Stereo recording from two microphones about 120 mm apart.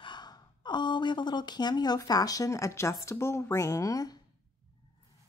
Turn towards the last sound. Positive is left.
turn(degrees=30)  # may be behind; listen again after turning